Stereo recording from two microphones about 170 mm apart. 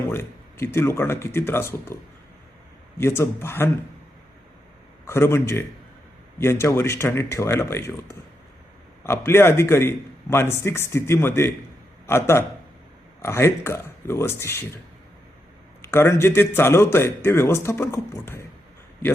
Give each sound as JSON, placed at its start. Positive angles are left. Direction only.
{"t": 0.1, "sound": "a man's voice", "side_deg": 15}
{"t": 3.0, "sound": "a man's voice", "side_deg": 15}
{"t": 5.0, "sound": "a man's voice", "side_deg": 15}
{"t": 15.8, "sound": "a man's voice", "side_deg": 15}